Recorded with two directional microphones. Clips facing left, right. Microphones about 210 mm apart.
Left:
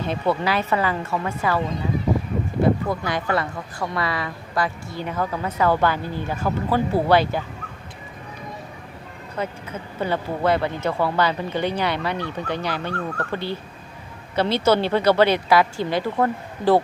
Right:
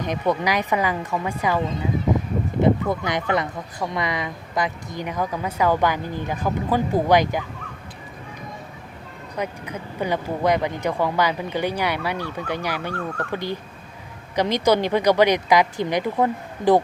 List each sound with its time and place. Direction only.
0.0 s speech: 15° right (ahead or behind)
9.3 s speech: 15° right (ahead or behind)